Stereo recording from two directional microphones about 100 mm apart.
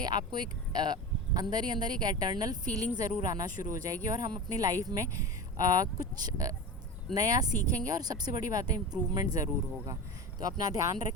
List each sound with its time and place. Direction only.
0.0 s speech: 45° right (ahead or behind)